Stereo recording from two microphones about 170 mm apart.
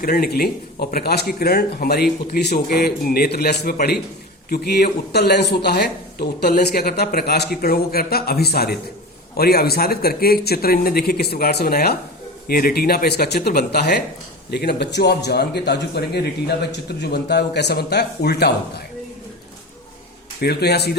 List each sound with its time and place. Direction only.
0.0 s speech: 60° left (ahead or behind)
20.4 s speech: 70° left (ahead or behind)